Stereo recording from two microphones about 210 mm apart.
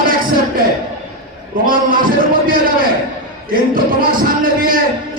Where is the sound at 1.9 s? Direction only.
40° right (ahead or behind).